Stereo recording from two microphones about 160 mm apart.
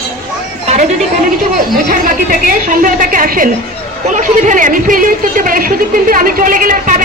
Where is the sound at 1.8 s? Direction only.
60° right (ahead or behind).